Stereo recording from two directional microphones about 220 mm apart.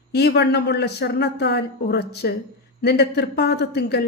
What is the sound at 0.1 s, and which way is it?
A man's voice, 50° left (ahead or behind).